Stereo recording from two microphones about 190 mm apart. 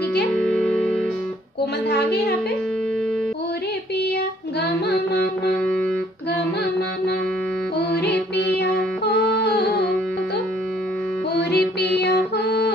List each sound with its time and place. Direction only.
0.4 s music: 5° left (ahead or behind)
1.9 s a sound: 60° left (ahead or behind)
4.8 s music: 60° left (ahead or behind)
7.9 s music: 60° left (ahead or behind)
11.3 s music: 60° left (ahead or behind)